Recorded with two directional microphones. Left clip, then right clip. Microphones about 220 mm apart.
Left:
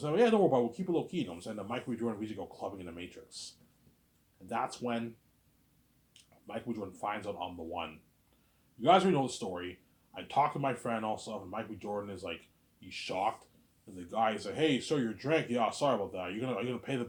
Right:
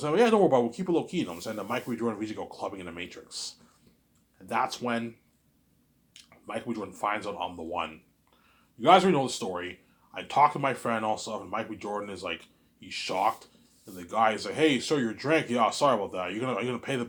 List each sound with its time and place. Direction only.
0.0 s a man's voice: 25° right (ahead or behind)
6.5 s a man's voice: 25° right (ahead or behind)